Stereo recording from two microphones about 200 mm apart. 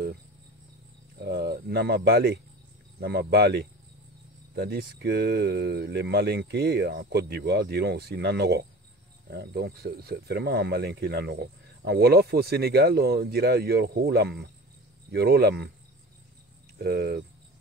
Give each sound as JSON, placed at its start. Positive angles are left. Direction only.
{"t": 1.2, "sound": "speech", "side_deg": -55}
{"t": 16.7, "sound": "speech", "side_deg": -50}